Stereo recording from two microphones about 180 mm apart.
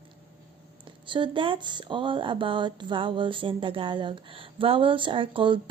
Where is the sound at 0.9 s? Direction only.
25° right (ahead or behind).